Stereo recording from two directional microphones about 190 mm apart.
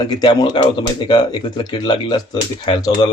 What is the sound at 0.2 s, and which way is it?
Speech, 20° left (ahead or behind).